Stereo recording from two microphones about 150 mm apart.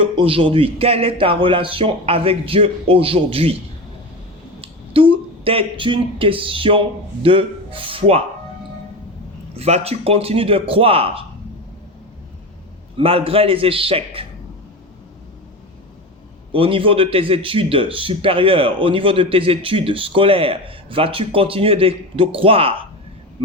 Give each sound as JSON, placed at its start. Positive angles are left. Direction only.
{"t": 0.0, "sound": "a man's voice", "side_deg": -35}
{"t": 4.6, "sound": "speech", "side_deg": -40}
{"t": 9.6, "sound": "a man's voice", "side_deg": -45}
{"t": 13.0, "sound": "a man's voice", "side_deg": -40}
{"t": 16.5, "sound": "a man's voice", "side_deg": -35}